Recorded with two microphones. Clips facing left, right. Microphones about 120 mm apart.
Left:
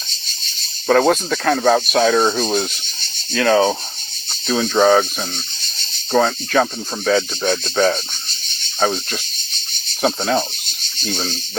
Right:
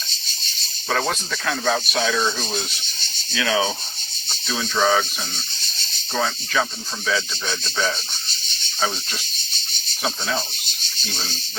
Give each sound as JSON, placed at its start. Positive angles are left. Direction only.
{"t": 0.9, "sound": "speech", "side_deg": 45}
{"t": 6.1, "sound": "speech", "side_deg": 50}
{"t": 10.0, "sound": "speech", "side_deg": 50}